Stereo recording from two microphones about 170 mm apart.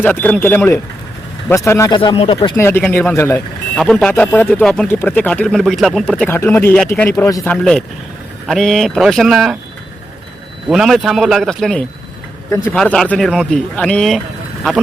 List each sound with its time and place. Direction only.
0.0 s speech: 10° left (ahead or behind)
2.0 s speech: 30° left (ahead or behind); by 7.1 s 5° left (ahead or behind)
7.2 s speech: 20° left (ahead or behind)
7.4 s speech: 5° left (ahead or behind)
10.7 s speech: centre (ahead or behind)